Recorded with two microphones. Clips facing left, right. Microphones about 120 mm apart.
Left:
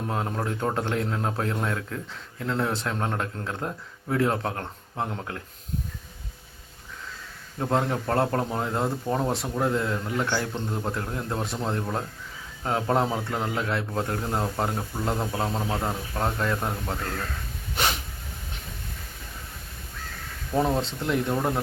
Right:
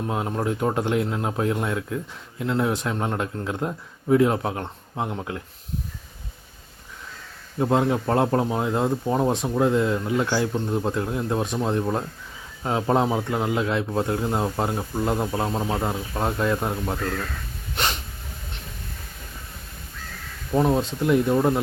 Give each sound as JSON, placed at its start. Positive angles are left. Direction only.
{"t": 0.1, "sound": "speech", "side_deg": -15}
{"t": 7.6, "sound": "speech", "side_deg": -15}
{"t": 17.7, "sound": "a sound", "side_deg": 0}
{"t": 20.5, "sound": "speech", "side_deg": -5}